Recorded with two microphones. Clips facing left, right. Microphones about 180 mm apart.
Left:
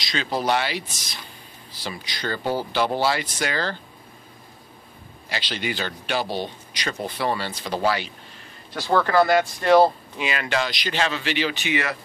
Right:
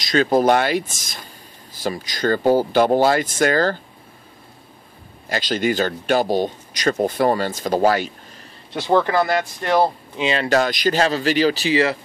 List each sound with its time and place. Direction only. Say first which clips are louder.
0.0 s speech: right 9 dB; 45° right (ahead or behind)
5.3 s speech: right 8 dB; 45° right (ahead or behind)
8.7 s speech: right 2 dB; 20° right (ahead or behind)
10.5 s speech: right 8 dB; 45° right (ahead or behind); by 12.0 s 30° right (ahead or behind)